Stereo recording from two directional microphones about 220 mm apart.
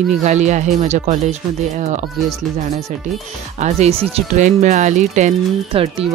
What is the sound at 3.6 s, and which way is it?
Speech, 30° right (ahead or behind).